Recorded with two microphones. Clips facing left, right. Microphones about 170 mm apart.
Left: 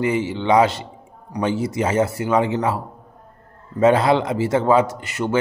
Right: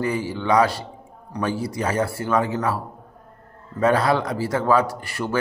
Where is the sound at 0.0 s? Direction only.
20° left (ahead or behind).